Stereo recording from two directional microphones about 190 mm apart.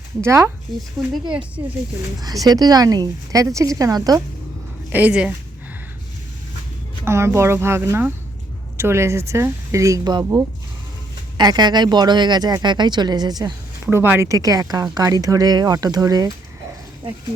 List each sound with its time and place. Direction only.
0.2 s speech: 15° right (ahead or behind)
1.0 s speech: centre (ahead or behind)
2.2 s speech: 20° right (ahead or behind)
4.9 s speech: 10° right (ahead or behind)
7.0 s speech: 15° right (ahead or behind)
13.8 s speech: 10° right (ahead or behind)